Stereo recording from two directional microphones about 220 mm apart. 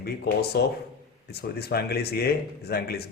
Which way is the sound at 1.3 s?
45° left (ahead or behind).